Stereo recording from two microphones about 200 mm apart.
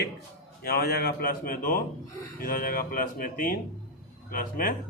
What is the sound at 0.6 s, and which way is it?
Speech, 55° left (ahead or behind).